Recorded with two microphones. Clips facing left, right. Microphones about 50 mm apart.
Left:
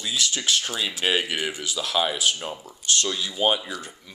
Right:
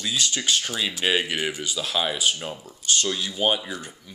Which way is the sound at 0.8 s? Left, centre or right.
Centre.